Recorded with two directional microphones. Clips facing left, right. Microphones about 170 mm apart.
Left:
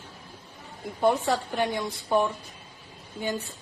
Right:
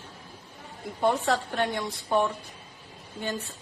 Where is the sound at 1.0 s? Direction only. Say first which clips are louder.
Left 1 dB; centre (ahead or behind).